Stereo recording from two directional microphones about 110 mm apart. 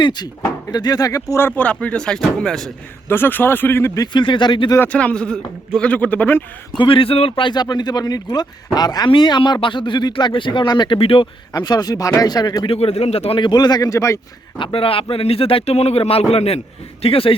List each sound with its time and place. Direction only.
0.0 s speech: 40° left (ahead or behind); by 2.7 s 5° left (ahead or behind)
3.1 s speech: 20° left (ahead or behind)
4.0 s speech: 45° left (ahead or behind)
4.9 s speech: 10° left (ahead or behind)
6.7 s speech: 50° left (ahead or behind)
11.5 s speech: 40° left (ahead or behind)
12.6 s a man's voice: 65° left (ahead or behind)
13.4 s speech: 40° left (ahead or behind)
14.6 s a man's voice: 55° left (ahead or behind)